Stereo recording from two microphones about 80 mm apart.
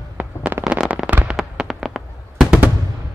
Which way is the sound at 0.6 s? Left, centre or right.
Centre.